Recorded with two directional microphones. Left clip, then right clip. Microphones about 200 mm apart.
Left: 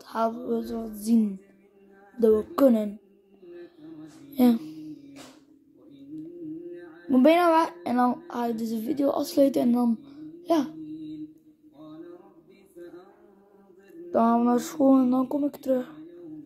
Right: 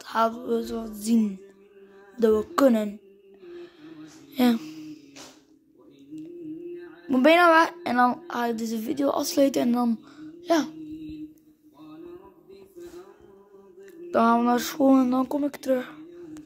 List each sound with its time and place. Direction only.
0.0 s a woman's voice: centre (ahead or behind)
3.4 s a sound: 5° left (ahead or behind)
7.1 s a woman's voice: 5° left (ahead or behind)
14.1 s a woman's voice: centre (ahead or behind)